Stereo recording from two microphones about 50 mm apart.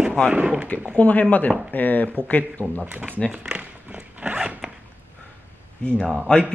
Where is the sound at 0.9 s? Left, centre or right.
Left.